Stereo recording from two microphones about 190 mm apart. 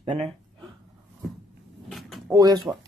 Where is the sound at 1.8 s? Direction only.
Centre (ahead or behind).